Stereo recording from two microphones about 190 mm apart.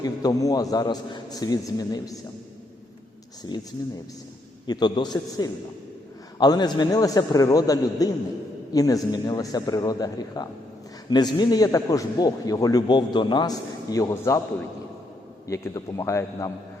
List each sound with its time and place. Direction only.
0.0 s a man's voice: 20° left (ahead or behind)
4.6 s a man's voice: 20° left (ahead or behind)
15.4 s a man's voice: 15° left (ahead or behind)